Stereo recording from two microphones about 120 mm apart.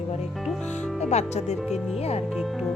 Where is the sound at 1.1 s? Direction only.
70° left (ahead or behind).